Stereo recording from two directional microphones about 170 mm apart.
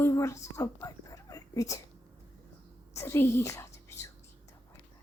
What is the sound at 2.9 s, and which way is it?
A woman's voice, 15° left (ahead or behind).